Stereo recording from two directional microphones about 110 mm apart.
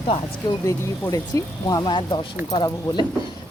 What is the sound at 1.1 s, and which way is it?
Speech, 30° left (ahead or behind).